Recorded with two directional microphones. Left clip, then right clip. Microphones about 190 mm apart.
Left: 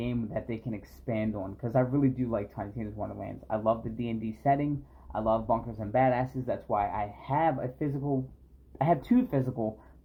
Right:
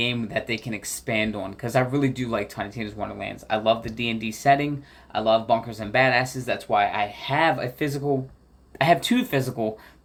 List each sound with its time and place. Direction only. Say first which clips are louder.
0.0 s speech: right 9 dB; 15° right (ahead or behind)